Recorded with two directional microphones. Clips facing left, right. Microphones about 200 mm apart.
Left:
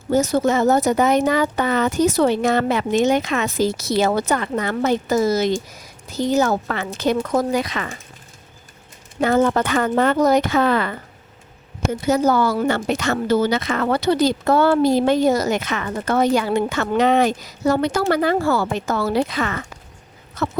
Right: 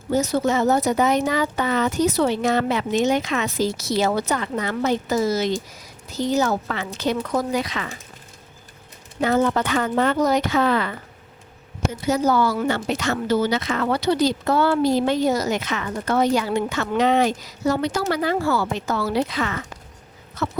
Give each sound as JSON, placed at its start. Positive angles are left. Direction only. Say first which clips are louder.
{"t": 0.1, "sound": "speech", "louder": "left 3 dB", "side_deg": 45}
{"t": 9.2, "sound": "speech", "louder": "left 3 dB", "side_deg": 50}